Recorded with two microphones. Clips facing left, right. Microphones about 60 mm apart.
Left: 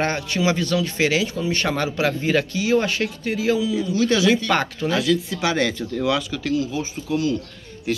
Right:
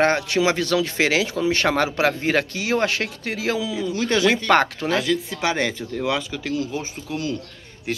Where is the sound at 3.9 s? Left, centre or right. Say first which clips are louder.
Left 1 dB; right.